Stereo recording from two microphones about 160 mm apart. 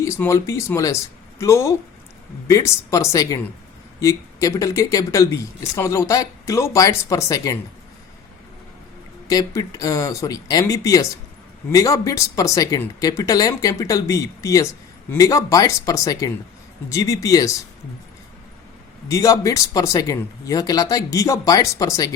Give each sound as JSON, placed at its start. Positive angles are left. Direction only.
{"t": 0.0, "sound": "speech", "side_deg": 20}
{"t": 9.2, "sound": "speech", "side_deg": 20}
{"t": 19.0, "sound": "speech", "side_deg": 20}